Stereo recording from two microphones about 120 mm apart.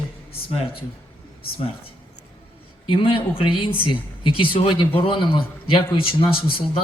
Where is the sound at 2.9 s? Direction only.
50° left (ahead or behind).